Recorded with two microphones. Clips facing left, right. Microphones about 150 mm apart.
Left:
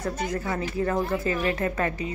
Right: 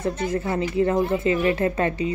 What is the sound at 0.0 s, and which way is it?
Speech, 25° right (ahead or behind).